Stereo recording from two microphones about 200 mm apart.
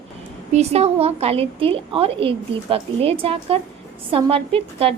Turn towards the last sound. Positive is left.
turn(degrees=-30)  # may be behind; listen again after turning